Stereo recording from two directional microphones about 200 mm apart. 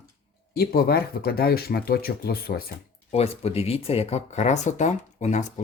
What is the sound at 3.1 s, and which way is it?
Speech, 30° left (ahead or behind).